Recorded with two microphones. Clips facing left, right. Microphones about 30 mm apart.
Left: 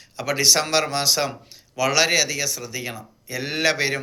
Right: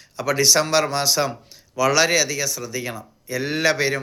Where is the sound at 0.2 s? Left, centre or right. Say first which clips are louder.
Right 2 dB; left.